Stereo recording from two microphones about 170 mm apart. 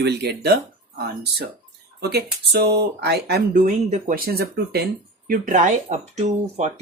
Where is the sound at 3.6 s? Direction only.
50° right (ahead or behind); by 4.8 s 70° right (ahead or behind).